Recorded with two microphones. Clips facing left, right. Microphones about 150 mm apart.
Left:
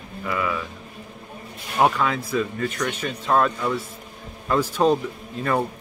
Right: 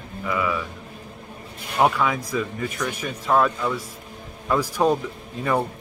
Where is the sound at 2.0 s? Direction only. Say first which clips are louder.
Left 1 dB; 10° right (ahead or behind).